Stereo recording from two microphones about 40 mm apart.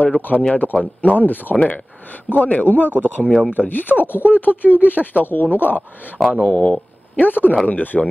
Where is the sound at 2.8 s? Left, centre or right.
Right.